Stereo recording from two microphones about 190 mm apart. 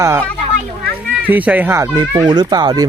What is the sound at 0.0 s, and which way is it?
Speech, 15° right (ahead or behind).